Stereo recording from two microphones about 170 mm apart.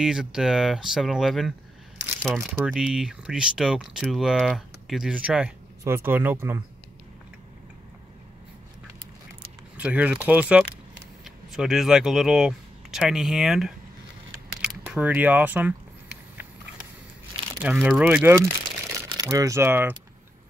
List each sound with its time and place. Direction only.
0.0 s speech: 5° right (ahead or behind)
9.8 s speech: 10° right (ahead or behind)
17.6 s speech: 10° right (ahead or behind)
19.0 s speech: 20° right (ahead or behind)